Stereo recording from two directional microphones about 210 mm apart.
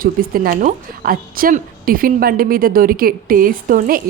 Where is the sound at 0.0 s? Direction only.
40° right (ahead or behind).